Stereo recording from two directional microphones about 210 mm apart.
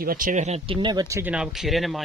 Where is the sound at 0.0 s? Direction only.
40° right (ahead or behind).